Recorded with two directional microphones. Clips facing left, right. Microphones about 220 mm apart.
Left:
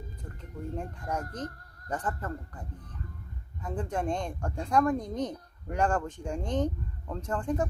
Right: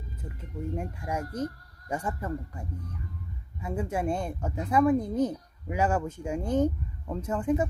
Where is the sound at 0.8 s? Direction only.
10° right (ahead or behind).